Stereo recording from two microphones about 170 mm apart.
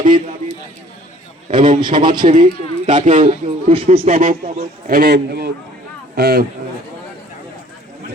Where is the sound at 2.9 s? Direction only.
45° right (ahead or behind).